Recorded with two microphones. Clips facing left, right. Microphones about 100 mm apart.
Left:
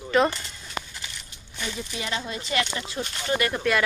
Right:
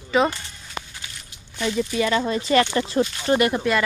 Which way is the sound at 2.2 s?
45° right (ahead or behind).